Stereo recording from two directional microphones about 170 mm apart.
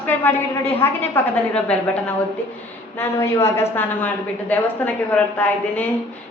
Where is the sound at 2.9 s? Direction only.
15° left (ahead or behind).